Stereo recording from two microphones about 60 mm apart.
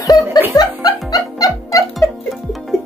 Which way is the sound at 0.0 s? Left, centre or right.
Left.